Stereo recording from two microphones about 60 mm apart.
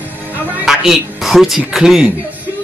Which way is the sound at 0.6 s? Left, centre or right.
Centre.